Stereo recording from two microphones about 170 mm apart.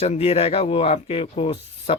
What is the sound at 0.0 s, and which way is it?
Speech, 35° left (ahead or behind).